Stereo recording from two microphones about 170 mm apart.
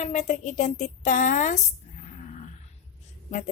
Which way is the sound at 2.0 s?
45° left (ahead or behind).